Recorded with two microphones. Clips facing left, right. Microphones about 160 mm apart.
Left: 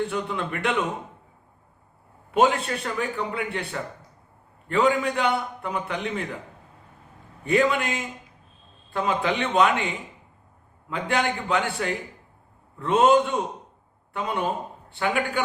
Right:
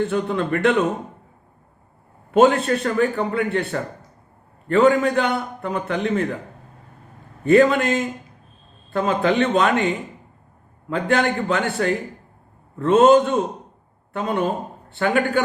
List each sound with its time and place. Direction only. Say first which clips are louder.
0.0 s a man's voice: right 6 dB; 45° right (ahead or behind)
2.3 s a man's voice: right 6 dB; 45° right (ahead or behind)
4.9 s a man's voice: right 4 dB; 45° right (ahead or behind)
7.4 s a man's voice: right 7 dB; 45° right (ahead or behind)